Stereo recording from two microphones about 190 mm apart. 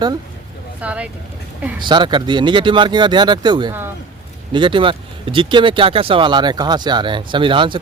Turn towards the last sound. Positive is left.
turn(degrees=-25)  # may be behind; listen again after turning